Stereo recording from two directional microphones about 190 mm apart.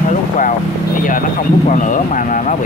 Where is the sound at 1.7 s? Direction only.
40° left (ahead or behind).